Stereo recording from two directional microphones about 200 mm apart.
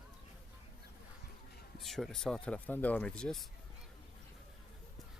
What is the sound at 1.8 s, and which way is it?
Speech, centre (ahead or behind).